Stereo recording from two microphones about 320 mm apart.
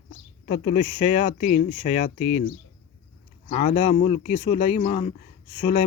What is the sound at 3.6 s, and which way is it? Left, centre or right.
Speech, left.